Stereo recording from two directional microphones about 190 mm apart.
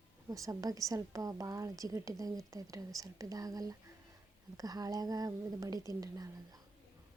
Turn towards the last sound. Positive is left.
turn(degrees=-20)  # may be behind; listen again after turning